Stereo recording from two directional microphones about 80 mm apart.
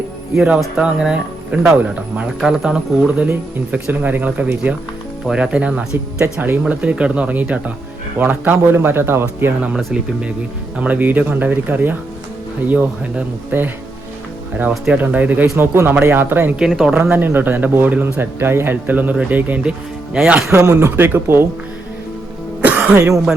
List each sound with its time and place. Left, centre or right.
0.6 s speech: centre
2.4 s a man's voice: centre; by 9.7 s right
9.7 s a man's voice: centre
14.9 s a man's voice: right
16.6 s speech: centre
16.9 s a man's voice: right
20.5 s speech: right
22.6 s cough: centre